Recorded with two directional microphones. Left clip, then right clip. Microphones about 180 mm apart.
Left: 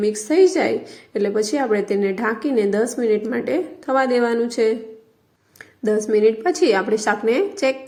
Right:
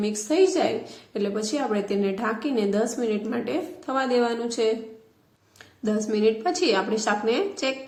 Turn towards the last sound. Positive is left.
turn(degrees=30)  # may be behind; listen again after turning